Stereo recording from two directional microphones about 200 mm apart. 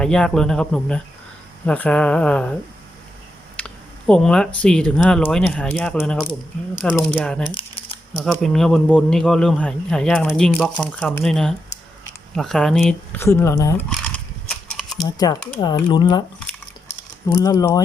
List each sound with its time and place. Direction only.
0.0 s speech: 5° left (ahead or behind)
3.6 s speech: 5° left (ahead or behind)
13.2 s speech: 15° left (ahead or behind)
14.8 s a sound: centre (ahead or behind)
15.0 s speech: 20° left (ahead or behind)
17.3 s speech: 15° left (ahead or behind)